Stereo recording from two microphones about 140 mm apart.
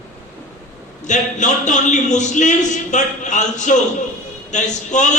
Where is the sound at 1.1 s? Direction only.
60° left (ahead or behind).